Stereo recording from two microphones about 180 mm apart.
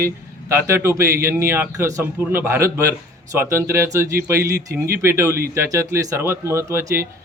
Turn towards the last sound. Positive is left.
turn(degrees=-15)  # may be behind; listen again after turning